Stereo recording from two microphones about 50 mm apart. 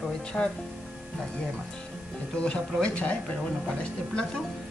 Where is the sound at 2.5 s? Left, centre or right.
Left.